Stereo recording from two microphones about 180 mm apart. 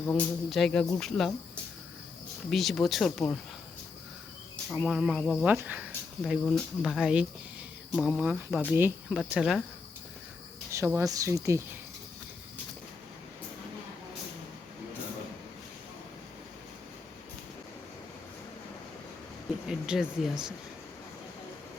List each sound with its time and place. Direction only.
0.1 s speech: 5° left (ahead or behind)
2.5 s speech: centre (ahead or behind)
4.7 s speech: centre (ahead or behind)
6.4 s speech: centre (ahead or behind)
10.7 s speech: 15° right (ahead or behind)
19.6 s speech: 5° right (ahead or behind)